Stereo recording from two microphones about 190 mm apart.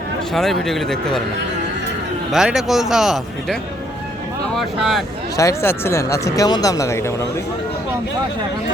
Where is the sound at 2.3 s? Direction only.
5° right (ahead or behind).